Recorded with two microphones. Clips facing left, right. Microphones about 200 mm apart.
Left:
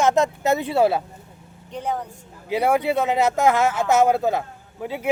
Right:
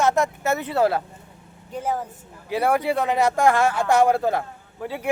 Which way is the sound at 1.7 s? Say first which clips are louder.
Right 1 dB; 5° right (ahead or behind).